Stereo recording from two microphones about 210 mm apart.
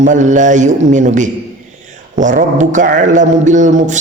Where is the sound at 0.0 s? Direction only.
35° right (ahead or behind).